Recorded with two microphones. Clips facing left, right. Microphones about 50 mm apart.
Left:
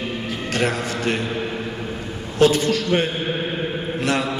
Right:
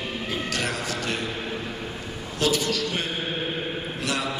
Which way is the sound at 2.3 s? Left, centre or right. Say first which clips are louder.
Left 8 dB; left.